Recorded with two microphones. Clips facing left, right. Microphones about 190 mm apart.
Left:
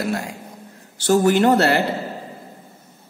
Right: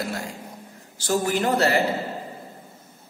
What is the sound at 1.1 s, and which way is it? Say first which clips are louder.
Speech: left 7 dB; 65° left (ahead or behind).